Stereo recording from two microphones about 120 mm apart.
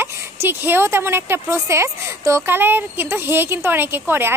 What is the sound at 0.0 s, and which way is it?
A woman's voice, 20° right (ahead or behind).